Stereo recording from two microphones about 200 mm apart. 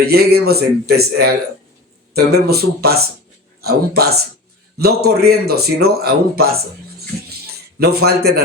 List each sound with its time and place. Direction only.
0.0 s a man's voice: 50° right (ahead or behind)
7.8 s a man's voice: 50° right (ahead or behind)